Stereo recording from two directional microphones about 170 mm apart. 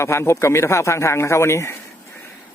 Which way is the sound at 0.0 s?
15° left (ahead or behind).